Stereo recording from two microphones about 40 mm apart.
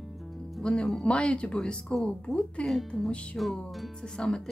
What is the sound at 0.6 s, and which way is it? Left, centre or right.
A woman's voice, left.